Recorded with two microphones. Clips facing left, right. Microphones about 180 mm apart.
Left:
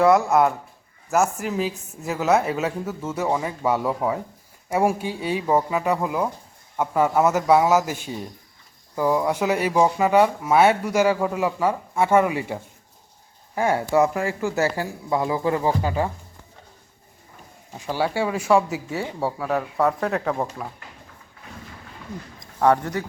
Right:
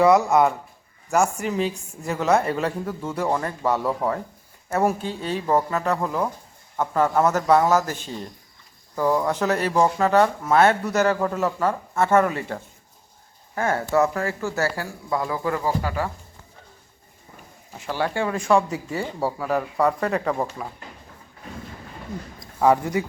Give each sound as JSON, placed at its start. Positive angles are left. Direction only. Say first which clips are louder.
{"t": 0.0, "sound": "speech", "louder": "even", "side_deg": 0}
{"t": 17.7, "sound": "speech", "louder": "left 1 dB", "side_deg": 10}
{"t": 22.4, "sound": "a man's voice", "louder": "even", "side_deg": -10}